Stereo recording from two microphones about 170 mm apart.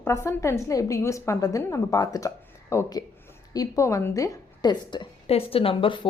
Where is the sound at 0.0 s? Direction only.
15° left (ahead or behind).